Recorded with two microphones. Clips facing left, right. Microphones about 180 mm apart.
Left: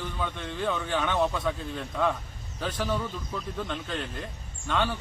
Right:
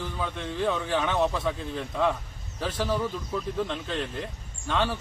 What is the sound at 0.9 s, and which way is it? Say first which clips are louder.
Speech: right 2 dB; 25° right (ahead or behind).